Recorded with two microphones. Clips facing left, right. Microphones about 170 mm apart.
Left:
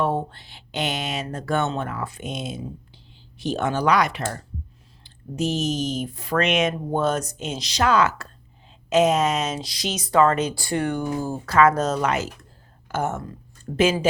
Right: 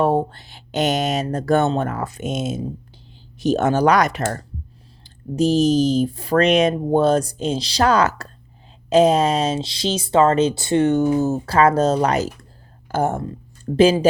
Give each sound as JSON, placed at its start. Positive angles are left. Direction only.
{"t": 0.0, "sound": "speech", "side_deg": -40}